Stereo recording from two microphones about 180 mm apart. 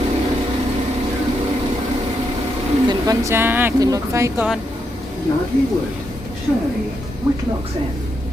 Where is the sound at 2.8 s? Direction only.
20° right (ahead or behind).